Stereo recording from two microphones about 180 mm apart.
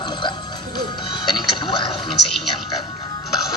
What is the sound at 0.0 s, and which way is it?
Music, 25° left (ahead or behind).